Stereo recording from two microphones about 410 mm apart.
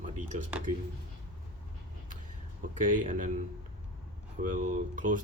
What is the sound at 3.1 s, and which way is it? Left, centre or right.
Speech, centre.